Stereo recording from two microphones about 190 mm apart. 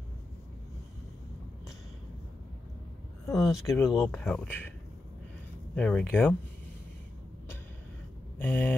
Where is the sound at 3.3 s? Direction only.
Centre (ahead or behind).